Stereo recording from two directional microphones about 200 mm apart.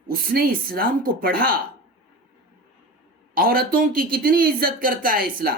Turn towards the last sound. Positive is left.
turn(degrees=-45)  # may be behind; listen again after turning